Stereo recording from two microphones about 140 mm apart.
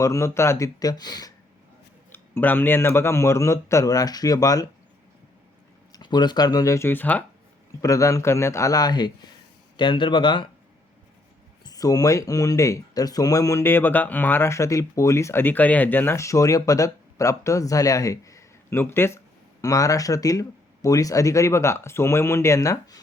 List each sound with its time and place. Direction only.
0.0 s speech: 20° left (ahead or behind)
2.1 s speech: 15° left (ahead or behind)
5.9 s speech: 30° left (ahead or behind); by 7.3 s 10° left (ahead or behind)
7.8 s speech: 25° left (ahead or behind)
11.6 s speech: 25° left (ahead or behind)